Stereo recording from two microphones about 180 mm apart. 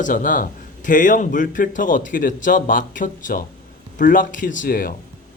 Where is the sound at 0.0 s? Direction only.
45° left (ahead or behind).